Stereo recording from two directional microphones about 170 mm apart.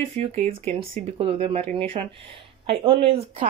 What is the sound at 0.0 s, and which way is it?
Speech, 35° right (ahead or behind).